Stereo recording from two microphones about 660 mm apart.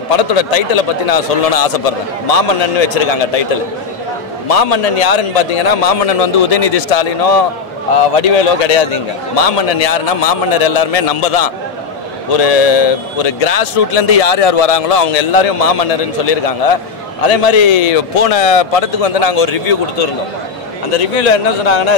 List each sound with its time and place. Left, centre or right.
0.1 s a man's voice: left
4.5 s a man's voice: left
20.9 s a man's voice: left